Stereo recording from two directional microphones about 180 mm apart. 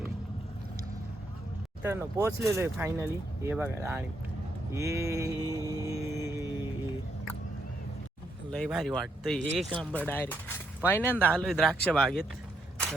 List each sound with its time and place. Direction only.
1.8 s speech: 15° right (ahead or behind)
8.4 s speech: centre (ahead or behind)